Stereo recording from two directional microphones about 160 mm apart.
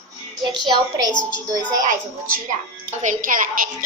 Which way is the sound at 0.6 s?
25° right (ahead or behind).